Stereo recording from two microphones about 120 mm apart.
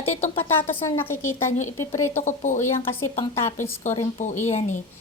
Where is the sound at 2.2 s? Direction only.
90° left.